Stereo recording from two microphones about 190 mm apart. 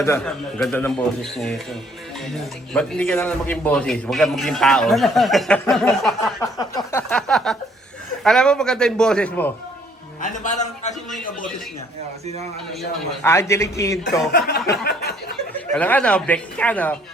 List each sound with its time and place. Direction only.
0.0 s a man's voice: 15° left (ahead or behind)
6.4 s a sound: 15° left (ahead or behind)
7.1 s a sound: 5° left (ahead or behind)
8.2 s a man's voice: 5° left (ahead or behind)
10.2 s a man's voice: 40° left (ahead or behind)
13.2 s speech: 15° left (ahead or behind)
14.3 s chuckle: 60° left (ahead or behind)
15.7 s speech: 5° left (ahead or behind)